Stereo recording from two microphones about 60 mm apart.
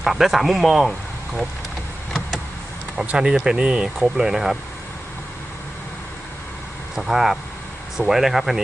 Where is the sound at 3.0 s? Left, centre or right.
Centre.